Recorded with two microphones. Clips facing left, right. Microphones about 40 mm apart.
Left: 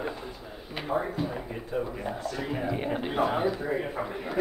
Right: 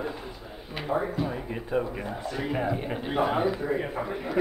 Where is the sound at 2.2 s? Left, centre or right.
Centre.